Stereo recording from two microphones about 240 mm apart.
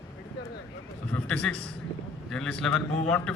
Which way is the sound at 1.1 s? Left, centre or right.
Centre.